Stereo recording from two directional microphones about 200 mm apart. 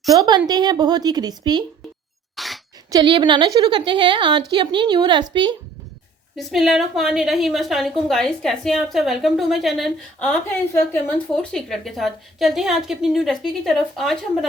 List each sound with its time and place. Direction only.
0.1 s a woman's voice: 20° right (ahead or behind)
2.3 s a sound: centre (ahead or behind)
2.9 s a woman's voice: 25° right (ahead or behind)
6.3 s a woman's voice: centre (ahead or behind)